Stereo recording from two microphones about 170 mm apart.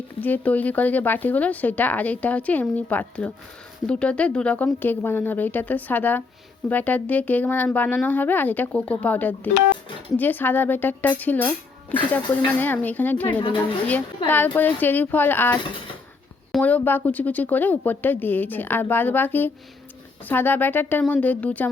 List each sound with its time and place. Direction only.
0.2 s speech: 10° left (ahead or behind)